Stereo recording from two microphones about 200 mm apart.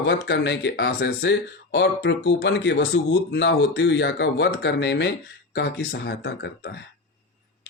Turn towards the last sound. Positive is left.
turn(degrees=60)  # may be behind; listen again after turning